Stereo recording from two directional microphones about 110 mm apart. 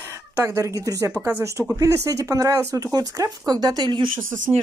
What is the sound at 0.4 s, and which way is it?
Speech, 25° right (ahead or behind).